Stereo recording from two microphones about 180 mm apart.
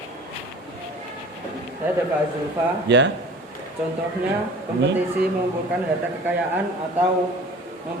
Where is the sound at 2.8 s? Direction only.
75° right (ahead or behind).